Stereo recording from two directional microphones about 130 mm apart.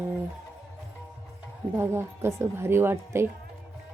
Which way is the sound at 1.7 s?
20° right (ahead or behind).